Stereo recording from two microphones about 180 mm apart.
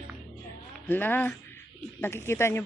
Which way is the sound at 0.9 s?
10° left (ahead or behind).